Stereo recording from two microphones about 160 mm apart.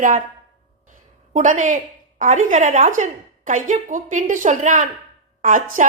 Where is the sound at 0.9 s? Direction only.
50° right (ahead or behind).